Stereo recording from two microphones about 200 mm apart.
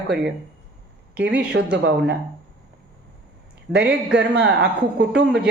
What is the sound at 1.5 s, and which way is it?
Speech, 60° right (ahead or behind).